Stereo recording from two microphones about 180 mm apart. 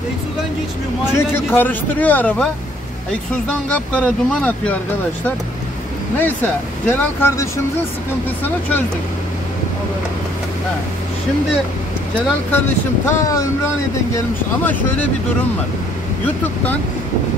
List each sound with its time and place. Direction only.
1.1 s speech: 10° left (ahead or behind)
6.1 s speech: 10° left (ahead or behind)
12.5 s speech: 15° left (ahead or behind)